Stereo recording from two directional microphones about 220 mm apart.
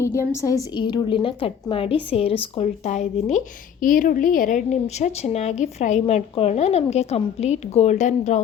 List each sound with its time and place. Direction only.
0.0 s a woman's voice: 15° left (ahead or behind); by 8.4 s 30° left (ahead or behind)